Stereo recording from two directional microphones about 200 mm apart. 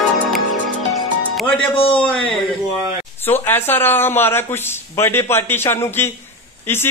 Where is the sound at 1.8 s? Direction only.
25° left (ahead or behind).